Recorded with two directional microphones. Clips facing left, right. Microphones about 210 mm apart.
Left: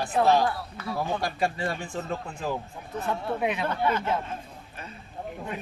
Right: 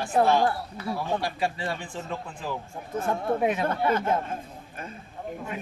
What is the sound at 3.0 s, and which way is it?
Speech, 45° right (ahead or behind).